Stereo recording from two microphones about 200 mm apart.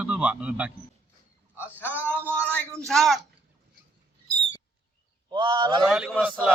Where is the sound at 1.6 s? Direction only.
10° left (ahead or behind).